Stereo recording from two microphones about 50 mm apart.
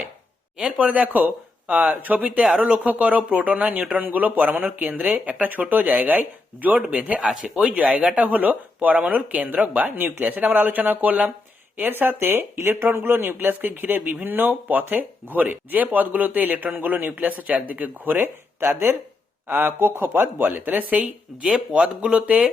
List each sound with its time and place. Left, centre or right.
0.5 s speech: centre
1.0 s speech: right
7.2 s speech: centre
11.8 s speech: right
21.7 s speech: centre